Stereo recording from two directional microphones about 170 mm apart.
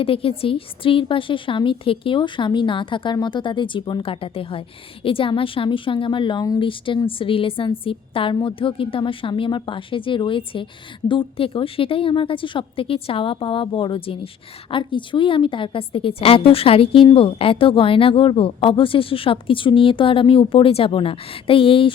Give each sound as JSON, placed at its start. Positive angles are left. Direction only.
{"t": 0.0, "sound": "a woman's voice", "side_deg": 35}